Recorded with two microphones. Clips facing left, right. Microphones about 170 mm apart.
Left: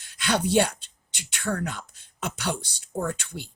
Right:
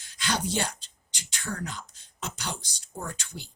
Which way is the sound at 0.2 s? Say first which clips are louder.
Left 7 dB; 60° left (ahead or behind).